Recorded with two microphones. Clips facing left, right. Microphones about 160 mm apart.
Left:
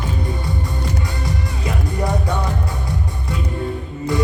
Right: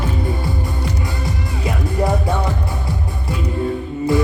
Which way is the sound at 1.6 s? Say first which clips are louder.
Right 4 dB; 25° right (ahead or behind).